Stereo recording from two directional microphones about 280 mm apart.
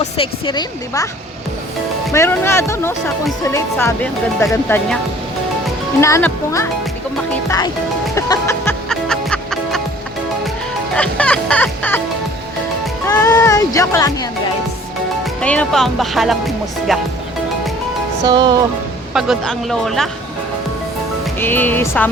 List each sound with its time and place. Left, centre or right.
0.0 s speech: centre
2.1 s speech: centre
6.0 s speech: centre
8.1 s music: centre
10.9 s music: centre
13.1 s music: centre
15.4 s speech: centre
18.3 s music: centre
19.1 s speech: centre
21.3 s speech: centre